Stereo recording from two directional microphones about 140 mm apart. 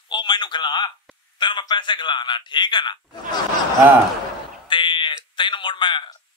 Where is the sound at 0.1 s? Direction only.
35° left (ahead or behind).